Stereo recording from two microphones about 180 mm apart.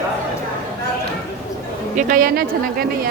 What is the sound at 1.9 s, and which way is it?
Speech, 50° right (ahead or behind).